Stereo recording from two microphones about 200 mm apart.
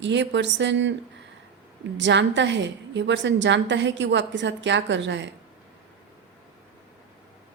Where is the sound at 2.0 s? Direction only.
60° right (ahead or behind).